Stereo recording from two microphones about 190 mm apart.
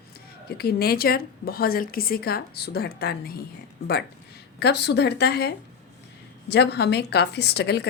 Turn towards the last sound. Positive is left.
turn(degrees=60)  # may be behind; listen again after turning